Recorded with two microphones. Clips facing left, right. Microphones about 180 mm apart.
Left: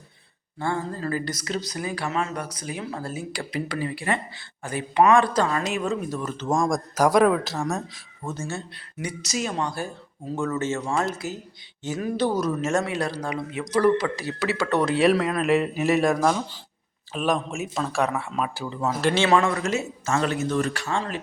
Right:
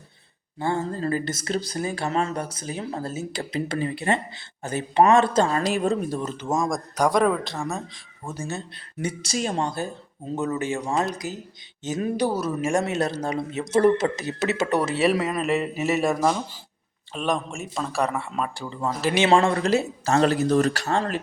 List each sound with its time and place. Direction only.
0.6 s speech: 25° right (ahead or behind)
6.3 s speech: 10° right (ahead or behind)
12.1 s speech: 10° right (ahead or behind)
12.8 s speech: 25° right (ahead or behind)
14.8 s a man's voice: 5° right (ahead or behind)
19.3 s speech: 30° right (ahead or behind)